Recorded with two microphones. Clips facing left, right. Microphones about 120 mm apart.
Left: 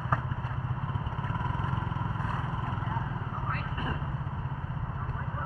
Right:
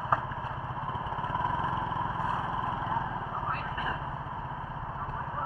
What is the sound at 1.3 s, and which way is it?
Vehicle, 15° right (ahead or behind).